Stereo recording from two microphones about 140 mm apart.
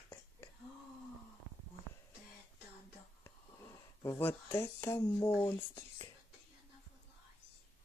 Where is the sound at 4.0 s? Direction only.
20° left (ahead or behind).